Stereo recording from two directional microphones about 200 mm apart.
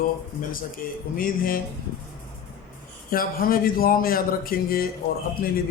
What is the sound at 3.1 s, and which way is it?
A man's voice, 45° left (ahead or behind).